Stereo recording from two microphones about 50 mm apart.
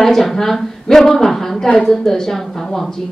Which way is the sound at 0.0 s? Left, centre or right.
Centre.